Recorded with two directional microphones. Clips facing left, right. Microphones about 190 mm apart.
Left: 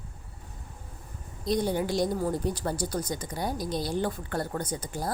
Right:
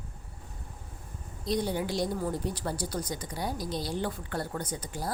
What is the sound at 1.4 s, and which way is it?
Speech, 45° left (ahead or behind).